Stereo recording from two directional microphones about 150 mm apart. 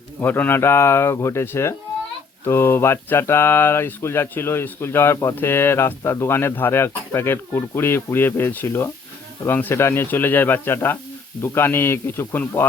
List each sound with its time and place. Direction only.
0.2 s speech: 15° left (ahead or behind)